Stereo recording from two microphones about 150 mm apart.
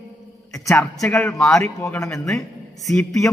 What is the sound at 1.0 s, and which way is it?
Speech, 10° left (ahead or behind).